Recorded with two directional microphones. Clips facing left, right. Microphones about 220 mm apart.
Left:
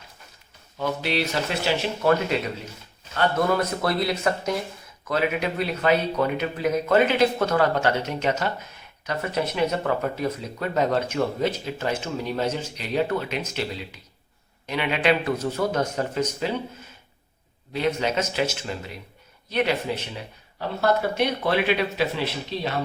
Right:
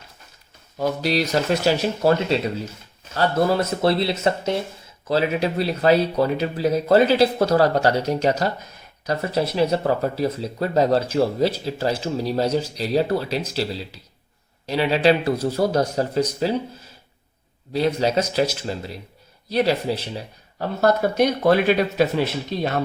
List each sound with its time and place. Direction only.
0.8 s speech: 40° right (ahead or behind)
3.2 s speech: 30° right (ahead or behind); by 22.8 s 50° right (ahead or behind)